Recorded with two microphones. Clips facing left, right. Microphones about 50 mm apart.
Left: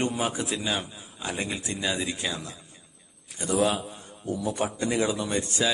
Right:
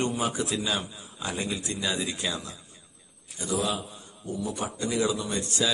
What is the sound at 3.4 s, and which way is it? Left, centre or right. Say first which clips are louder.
A man's voice: left 4 dB; left.